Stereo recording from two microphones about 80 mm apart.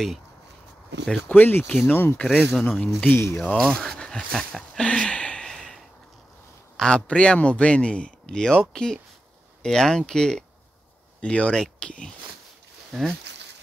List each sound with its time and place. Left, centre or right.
1.3 s speech: left
2.2 s speech: centre
2.8 s speech: centre
3.3 s a sound: centre
6.8 s speech: centre
12.9 s speech: centre